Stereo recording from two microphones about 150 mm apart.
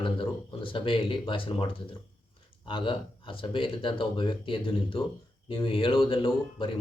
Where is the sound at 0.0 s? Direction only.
35° left (ahead or behind).